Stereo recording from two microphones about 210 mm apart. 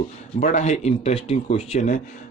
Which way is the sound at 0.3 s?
35° left (ahead or behind).